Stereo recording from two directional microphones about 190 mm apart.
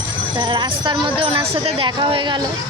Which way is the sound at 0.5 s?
25° right (ahead or behind).